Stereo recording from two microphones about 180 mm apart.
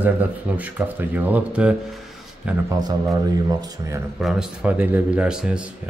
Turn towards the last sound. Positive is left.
turn(degrees=-5)  # may be behind; listen again after turning